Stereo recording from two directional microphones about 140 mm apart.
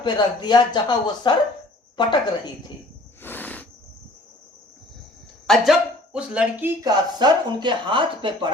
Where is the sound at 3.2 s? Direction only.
15° left (ahead or behind).